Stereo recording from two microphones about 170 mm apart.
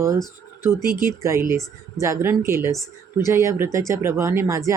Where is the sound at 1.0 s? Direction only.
15° right (ahead or behind).